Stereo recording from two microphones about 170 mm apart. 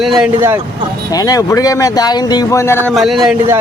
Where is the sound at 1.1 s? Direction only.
20° left (ahead or behind).